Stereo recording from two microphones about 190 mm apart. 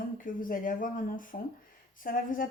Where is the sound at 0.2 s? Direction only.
45° left (ahead or behind).